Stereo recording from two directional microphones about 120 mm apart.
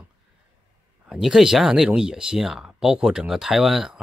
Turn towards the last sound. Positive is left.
turn(degrees=-5)  # may be behind; listen again after turning